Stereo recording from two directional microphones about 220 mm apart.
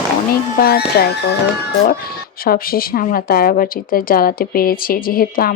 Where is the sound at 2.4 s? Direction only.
40° left (ahead or behind).